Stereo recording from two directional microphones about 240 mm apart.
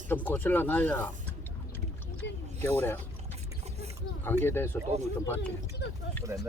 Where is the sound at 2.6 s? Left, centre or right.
Centre.